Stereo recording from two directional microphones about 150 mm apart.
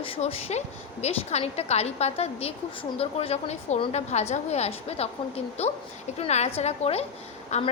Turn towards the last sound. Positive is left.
turn(degrees=50)  # may be behind; listen again after turning